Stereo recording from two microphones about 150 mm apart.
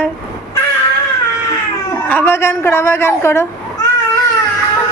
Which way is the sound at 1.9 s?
15° left (ahead or behind).